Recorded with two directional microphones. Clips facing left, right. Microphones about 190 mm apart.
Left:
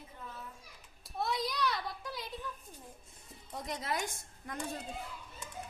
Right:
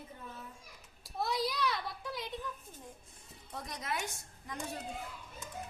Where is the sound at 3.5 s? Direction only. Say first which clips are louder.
Left 2 dB; 20° left (ahead or behind).